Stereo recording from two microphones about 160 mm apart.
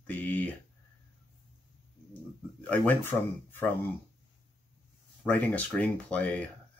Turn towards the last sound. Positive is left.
turn(degrees=10)  # may be behind; listen again after turning